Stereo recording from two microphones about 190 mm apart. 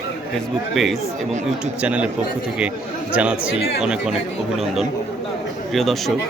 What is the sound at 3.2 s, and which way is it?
A man's voice, 5° right (ahead or behind).